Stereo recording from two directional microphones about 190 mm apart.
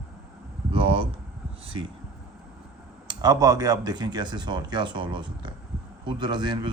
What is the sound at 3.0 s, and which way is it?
Speech, 20° right (ahead or behind).